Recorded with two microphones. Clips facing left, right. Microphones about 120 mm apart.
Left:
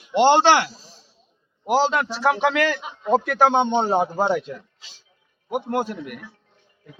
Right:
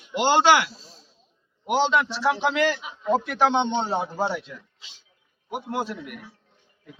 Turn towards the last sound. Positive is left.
turn(degrees=50)  # may be behind; listen again after turning